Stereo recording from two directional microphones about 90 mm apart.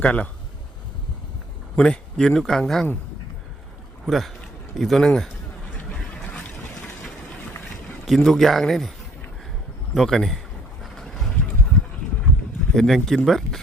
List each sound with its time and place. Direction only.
0.0 s speech: 15° left (ahead or behind)
1.7 s speech: 10° left (ahead or behind)
4.0 s speech: centre (ahead or behind)
8.0 s speech: centre (ahead or behind)
9.9 s speech: centre (ahead or behind)
10.8 s vehicle: 5° left (ahead or behind)
12.7 s speech: 5° left (ahead or behind)